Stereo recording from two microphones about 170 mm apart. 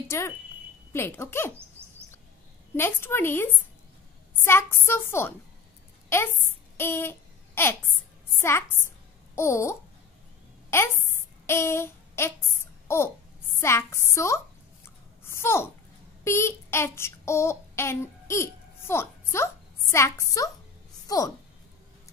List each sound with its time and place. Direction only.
0.1 s speech: 15° left (ahead or behind)
2.7 s speech: 15° left (ahead or behind)
6.8 s a sound: 15° left (ahead or behind)
8.4 s a child's voice: 15° left (ahead or behind)
10.7 s a sound: 15° left (ahead or behind)
12.8 s a child's voice: 15° left (ahead or behind)
15.2 s babbling: 15° left (ahead or behind)
16.3 s child singing: 15° left (ahead or behind)
21.1 s a woman's voice: 20° left (ahead or behind)